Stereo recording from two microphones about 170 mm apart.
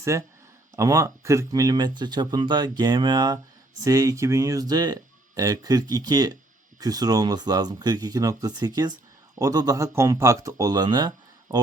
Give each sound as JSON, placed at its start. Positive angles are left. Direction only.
{"t": 0.0, "sound": "speech", "side_deg": -15}